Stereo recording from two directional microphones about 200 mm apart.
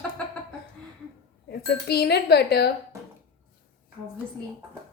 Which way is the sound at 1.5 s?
55° left (ahead or behind).